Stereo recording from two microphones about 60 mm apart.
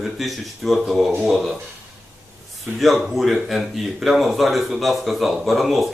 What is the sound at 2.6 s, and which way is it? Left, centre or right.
Speech, centre.